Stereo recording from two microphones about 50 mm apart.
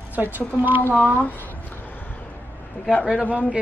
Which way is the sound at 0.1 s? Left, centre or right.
Right.